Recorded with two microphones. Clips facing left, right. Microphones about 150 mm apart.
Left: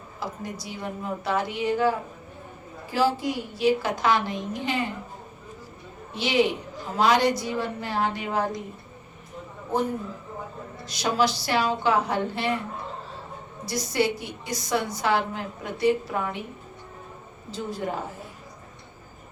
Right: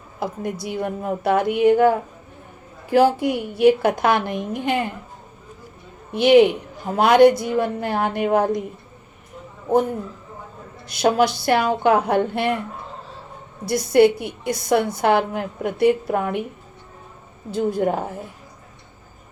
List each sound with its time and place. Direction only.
0.2 s a woman's voice: 55° right (ahead or behind)
2.9 s a woman's voice: 60° right (ahead or behind)
6.1 s a woman's voice: 55° right (ahead or behind)
10.8 s a woman's voice: 55° right (ahead or behind)
13.7 s a woman's voice: 55° right (ahead or behind)
17.5 s a woman's voice: 55° right (ahead or behind)